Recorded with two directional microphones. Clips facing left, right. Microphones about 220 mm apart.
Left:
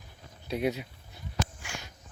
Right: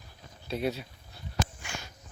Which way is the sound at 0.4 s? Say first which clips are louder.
Left 2 dB; 15° left (ahead or behind).